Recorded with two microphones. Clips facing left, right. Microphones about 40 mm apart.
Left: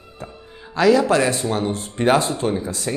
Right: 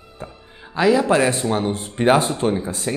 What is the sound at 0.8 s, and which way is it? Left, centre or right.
A man's voice, right.